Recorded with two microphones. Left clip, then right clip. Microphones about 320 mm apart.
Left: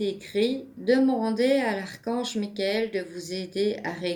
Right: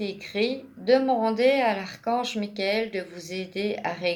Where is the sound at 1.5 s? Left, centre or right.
Centre.